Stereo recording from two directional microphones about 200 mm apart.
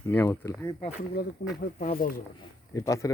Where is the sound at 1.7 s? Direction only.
40° left (ahead or behind).